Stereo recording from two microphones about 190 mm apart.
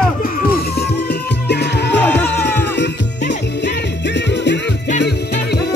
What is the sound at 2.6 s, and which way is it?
Music, 65° left (ahead or behind).